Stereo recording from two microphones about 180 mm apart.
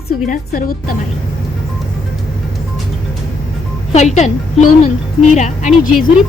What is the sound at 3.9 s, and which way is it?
A woman's voice, 40° left (ahead or behind).